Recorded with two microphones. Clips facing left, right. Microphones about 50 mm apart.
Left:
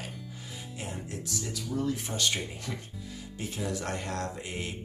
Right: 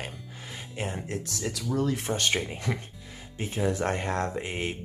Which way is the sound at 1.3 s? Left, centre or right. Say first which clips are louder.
Right 4 dB; right.